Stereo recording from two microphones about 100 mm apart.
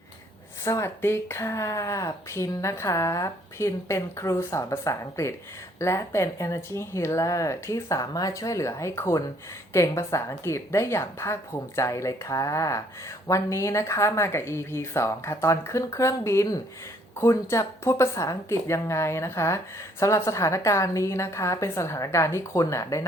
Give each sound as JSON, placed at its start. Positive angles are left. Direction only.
{"t": 0.6, "sound": "a woman's voice", "side_deg": 30}